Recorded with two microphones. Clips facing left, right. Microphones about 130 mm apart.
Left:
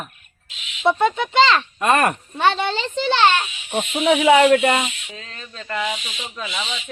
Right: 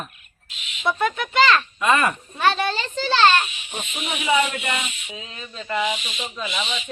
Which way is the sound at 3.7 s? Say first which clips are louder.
Left 18 dB; 80° left.